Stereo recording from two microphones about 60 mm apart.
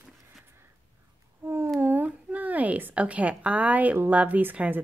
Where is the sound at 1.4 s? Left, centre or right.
Right.